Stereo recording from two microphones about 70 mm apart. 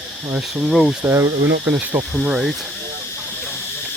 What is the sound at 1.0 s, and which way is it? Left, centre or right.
Speech, right.